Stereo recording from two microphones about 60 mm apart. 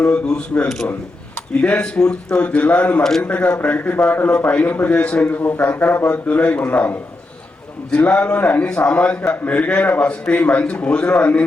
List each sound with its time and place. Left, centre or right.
0.0 s a man's voice: centre
3.0 s speech: centre
3.2 s a man's voice: left
6.1 s a man's voice: left